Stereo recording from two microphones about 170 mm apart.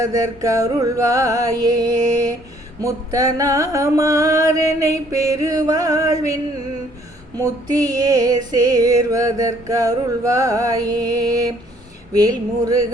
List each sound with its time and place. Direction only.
0.0 s female singing: 20° right (ahead or behind)